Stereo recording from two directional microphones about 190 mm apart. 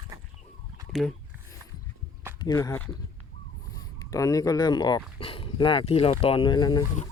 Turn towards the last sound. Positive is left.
turn(degrees=25)  # may be behind; listen again after turning